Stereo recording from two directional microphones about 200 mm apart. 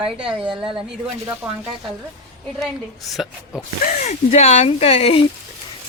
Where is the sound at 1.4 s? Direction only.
15° right (ahead or behind).